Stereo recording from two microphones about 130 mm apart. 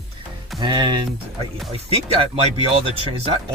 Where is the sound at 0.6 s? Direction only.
35° right (ahead or behind).